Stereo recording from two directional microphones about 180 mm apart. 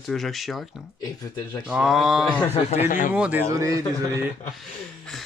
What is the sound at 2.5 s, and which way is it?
Speech, 35° left (ahead or behind).